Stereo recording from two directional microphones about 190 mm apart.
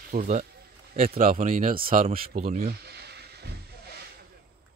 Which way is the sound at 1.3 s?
45° right (ahead or behind).